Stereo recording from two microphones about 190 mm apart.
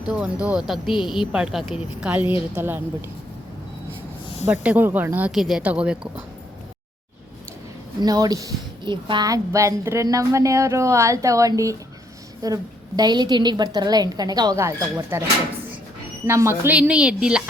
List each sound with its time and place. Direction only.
0.1 s a woman's voice: 5° right (ahead or behind)
4.4 s a woman's voice: 10° right (ahead or behind)
8.0 s a woman's voice: 20° right (ahead or behind)
16.2 s speech: 15° right (ahead or behind)